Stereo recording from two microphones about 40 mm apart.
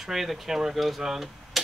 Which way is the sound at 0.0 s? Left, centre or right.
Centre.